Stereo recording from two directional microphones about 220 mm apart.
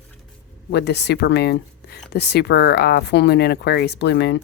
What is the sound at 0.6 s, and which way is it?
Speech, 50° left (ahead or behind).